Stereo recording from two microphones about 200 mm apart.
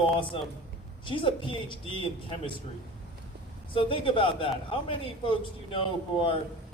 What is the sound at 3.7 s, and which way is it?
Speech, 25° left (ahead or behind).